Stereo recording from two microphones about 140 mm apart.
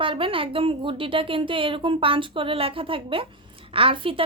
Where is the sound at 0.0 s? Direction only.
40° right (ahead or behind).